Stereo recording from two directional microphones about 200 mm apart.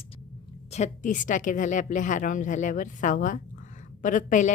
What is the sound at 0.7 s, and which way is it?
A woman's voice, 35° left (ahead or behind).